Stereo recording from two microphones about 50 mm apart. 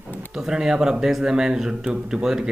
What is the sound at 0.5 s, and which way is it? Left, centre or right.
Speech, centre.